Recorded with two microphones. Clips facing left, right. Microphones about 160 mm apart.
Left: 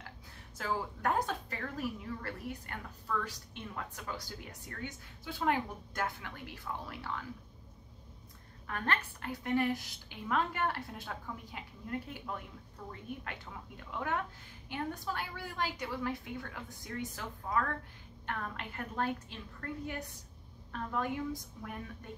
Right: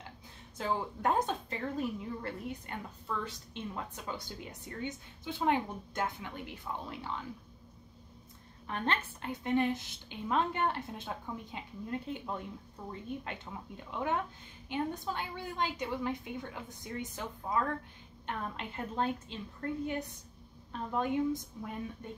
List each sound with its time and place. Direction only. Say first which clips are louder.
0.6 s a woman's voice: right 2 dB; 20° right (ahead or behind)
8.6 s a woman's voice: right 1 dB; 20° right (ahead or behind)